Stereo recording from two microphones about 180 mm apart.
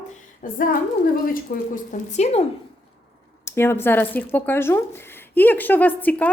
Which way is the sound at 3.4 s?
15° left (ahead or behind).